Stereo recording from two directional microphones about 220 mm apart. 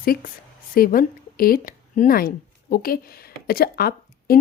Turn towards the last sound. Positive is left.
turn(degrees=45)  # may be behind; listen again after turning